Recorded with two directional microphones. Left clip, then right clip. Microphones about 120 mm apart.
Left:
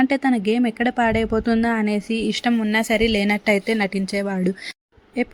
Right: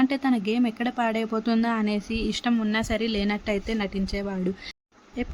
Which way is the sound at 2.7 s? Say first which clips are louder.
Left 8 dB; 30° left (ahead or behind).